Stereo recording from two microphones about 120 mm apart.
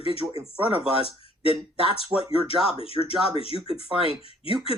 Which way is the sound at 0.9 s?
50° left (ahead or behind).